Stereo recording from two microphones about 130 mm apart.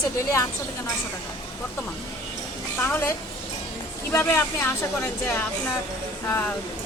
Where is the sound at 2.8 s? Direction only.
15° left (ahead or behind).